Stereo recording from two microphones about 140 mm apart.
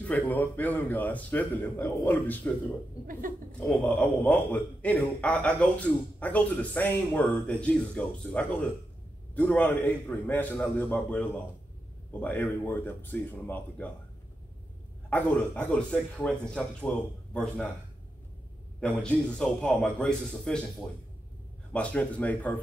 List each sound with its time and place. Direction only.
0.0 s a man's voice: 10° left (ahead or behind)
3.1 s speech: 80° right
3.5 s a man's voice: 5° left (ahead or behind)
15.0 s a man's voice: 10° left (ahead or behind)
18.8 s a man's voice: 5° left (ahead or behind)
21.7 s a man's voice: 10° left (ahead or behind)